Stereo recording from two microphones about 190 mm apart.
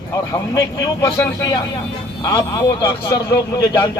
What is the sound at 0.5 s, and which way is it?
A man's voice, 20° left (ahead or behind).